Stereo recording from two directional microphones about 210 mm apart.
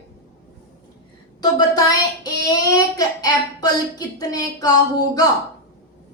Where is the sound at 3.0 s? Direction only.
20° left (ahead or behind).